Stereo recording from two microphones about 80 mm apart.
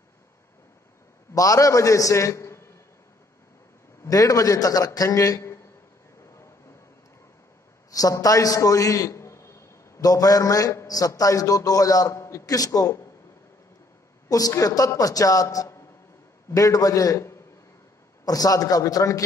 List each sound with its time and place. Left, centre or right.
1.3 s a man's voice: left
4.0 s a man's voice: left
7.9 s a sound: left
10.0 s a man's voice: left
14.3 s a man's voice: left
18.2 s a man's voice: left